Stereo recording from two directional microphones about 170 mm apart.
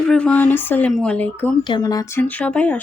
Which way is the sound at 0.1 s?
5° left (ahead or behind).